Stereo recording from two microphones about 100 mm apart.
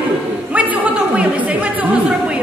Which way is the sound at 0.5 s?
15° right (ahead or behind).